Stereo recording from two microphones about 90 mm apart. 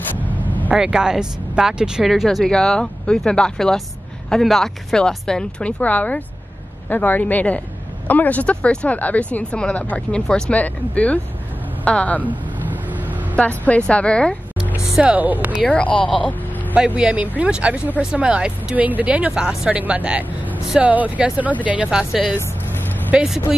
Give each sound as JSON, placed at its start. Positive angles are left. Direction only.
{"t": 0.7, "sound": "speech", "side_deg": -10}
{"t": 12.3, "sound": "vehicle", "side_deg": -20}
{"t": 13.4, "sound": "speech", "side_deg": 15}
{"t": 14.9, "sound": "speech", "side_deg": -10}
{"t": 15.6, "sound": "speech", "side_deg": 15}
{"t": 16.2, "sound": "vehicle", "side_deg": 15}
{"t": 16.7, "sound": "speech", "side_deg": -15}
{"t": 20.9, "sound": "speech", "side_deg": -15}
{"t": 21.9, "sound": "speech", "side_deg": -5}